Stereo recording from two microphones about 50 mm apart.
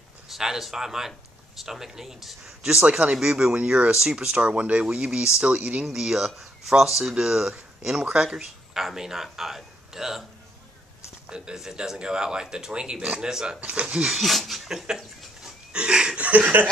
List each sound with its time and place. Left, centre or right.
0.3 s speech: centre
2.6 s speech: centre
5.9 s speech: centre
11.2 s speech: centre
13.3 s speech: centre
13.7 s speech: right
14.2 s a sound: centre
15.7 s a sound: centre
16.2 s speech: right